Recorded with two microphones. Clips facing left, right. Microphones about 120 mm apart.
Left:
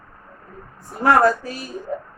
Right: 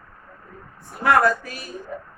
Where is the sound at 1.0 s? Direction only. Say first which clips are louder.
Left 3 dB; 35° left (ahead or behind).